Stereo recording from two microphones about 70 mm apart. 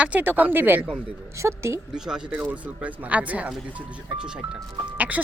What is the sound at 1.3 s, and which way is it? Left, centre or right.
Speech, right.